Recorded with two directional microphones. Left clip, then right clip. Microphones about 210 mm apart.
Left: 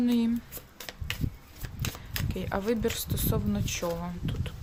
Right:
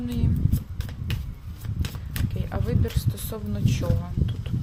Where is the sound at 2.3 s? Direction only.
15° left (ahead or behind).